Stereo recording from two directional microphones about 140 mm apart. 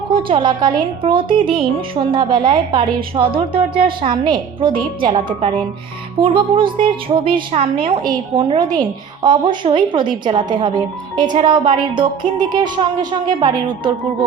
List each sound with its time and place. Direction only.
0.1 s speech: 35° right (ahead or behind)